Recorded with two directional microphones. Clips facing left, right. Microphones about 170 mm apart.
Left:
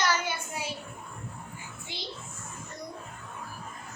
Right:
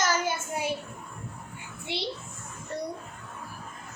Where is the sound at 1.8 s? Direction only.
70° right (ahead or behind).